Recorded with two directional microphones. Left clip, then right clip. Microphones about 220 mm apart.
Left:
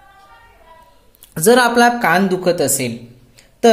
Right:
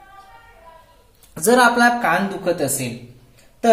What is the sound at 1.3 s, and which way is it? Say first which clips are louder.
Speech: left 3 dB; 40° left (ahead or behind).